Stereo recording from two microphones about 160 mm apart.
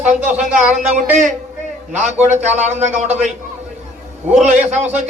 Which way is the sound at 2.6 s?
45° right (ahead or behind).